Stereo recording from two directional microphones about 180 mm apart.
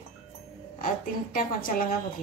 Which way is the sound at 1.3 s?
50° left (ahead or behind).